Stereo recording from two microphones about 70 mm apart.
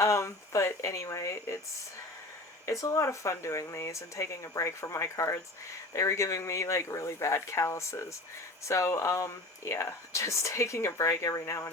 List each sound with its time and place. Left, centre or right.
0.0 s speech: left
2.6 s speech: left